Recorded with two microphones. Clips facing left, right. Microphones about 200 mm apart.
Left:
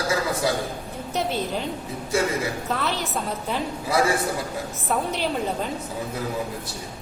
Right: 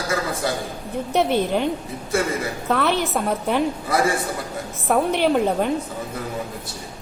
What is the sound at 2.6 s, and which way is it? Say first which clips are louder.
A woman's voice: right 6 dB; 60° right (ahead or behind).